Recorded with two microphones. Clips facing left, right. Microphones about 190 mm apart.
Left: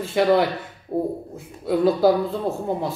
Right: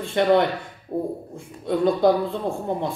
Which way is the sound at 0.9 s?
5° left (ahead or behind).